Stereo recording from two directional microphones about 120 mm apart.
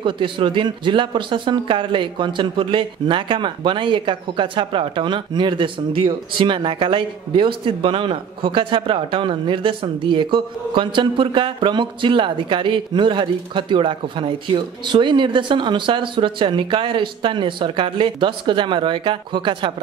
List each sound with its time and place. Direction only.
0.0 s speech: 45° right (ahead or behind)